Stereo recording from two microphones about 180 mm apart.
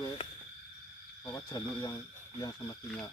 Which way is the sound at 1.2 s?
20° left (ahead or behind).